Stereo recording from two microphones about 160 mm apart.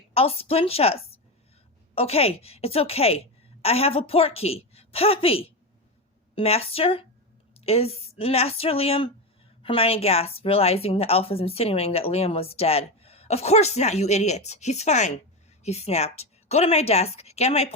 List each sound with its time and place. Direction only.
0.1 s a woman's voice: 35° left (ahead or behind)
2.0 s a woman's voice: 40° left (ahead or behind)